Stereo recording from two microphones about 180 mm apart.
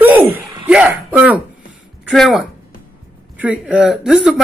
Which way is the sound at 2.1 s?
Centre (ahead or behind).